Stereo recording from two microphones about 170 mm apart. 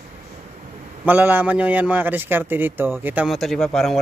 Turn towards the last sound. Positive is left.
turn(degrees=0)  # may be behind; listen again after turning